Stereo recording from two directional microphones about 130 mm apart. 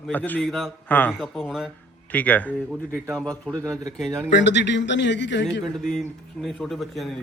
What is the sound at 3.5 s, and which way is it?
Speech, 30° right (ahead or behind).